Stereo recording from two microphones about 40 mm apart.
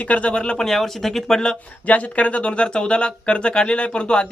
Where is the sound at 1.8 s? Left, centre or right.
Left.